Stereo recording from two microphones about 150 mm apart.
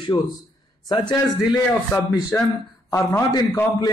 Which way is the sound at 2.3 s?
15° left (ahead or behind).